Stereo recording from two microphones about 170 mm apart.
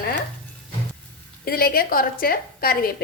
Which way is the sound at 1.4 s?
60° left (ahead or behind).